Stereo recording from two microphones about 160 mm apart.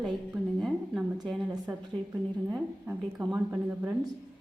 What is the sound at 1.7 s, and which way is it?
A woman's voice, 15° right (ahead or behind).